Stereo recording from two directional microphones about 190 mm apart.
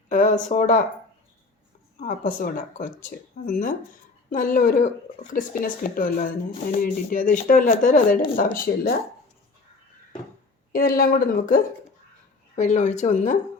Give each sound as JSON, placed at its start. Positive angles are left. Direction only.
{"t": 0.1, "sound": "a sound", "side_deg": 45}
{"t": 0.4, "sound": "speech", "side_deg": 45}
{"t": 2.0, "sound": "speech", "side_deg": 45}
{"t": 10.7, "sound": "speech", "side_deg": 50}